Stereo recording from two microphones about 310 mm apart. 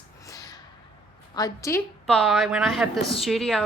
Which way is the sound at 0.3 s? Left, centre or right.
Centre.